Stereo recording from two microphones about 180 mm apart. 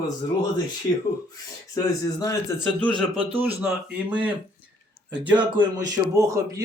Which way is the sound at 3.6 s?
5° right (ahead or behind).